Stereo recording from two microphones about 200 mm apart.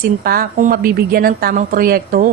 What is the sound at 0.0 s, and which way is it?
Speech, 45° right (ahead or behind).